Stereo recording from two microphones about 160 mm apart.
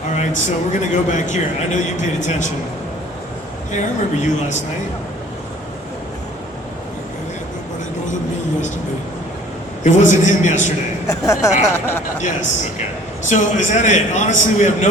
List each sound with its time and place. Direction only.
0.2 s a man's voice: 50° left (ahead or behind)
3.7 s a man's voice: 50° left (ahead or behind)
9.8 s a man's voice: 50° left (ahead or behind)
11.0 s speech: 20° left (ahead or behind)
13.2 s a man's voice: 50° left (ahead or behind)